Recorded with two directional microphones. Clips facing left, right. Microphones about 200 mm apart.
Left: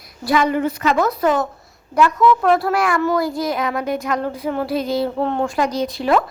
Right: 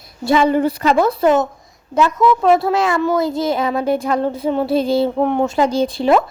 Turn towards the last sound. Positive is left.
turn(degrees=-25)  # may be behind; listen again after turning